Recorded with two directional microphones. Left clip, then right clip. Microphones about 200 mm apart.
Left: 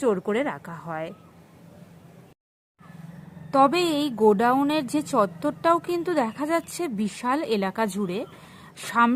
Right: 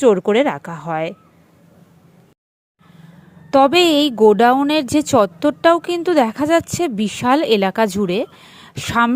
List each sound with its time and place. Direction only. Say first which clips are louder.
0.0 s a woman's voice: right 11 dB; 25° right (ahead or behind)
3.5 s a woman's voice: right 8 dB; 25° right (ahead or behind)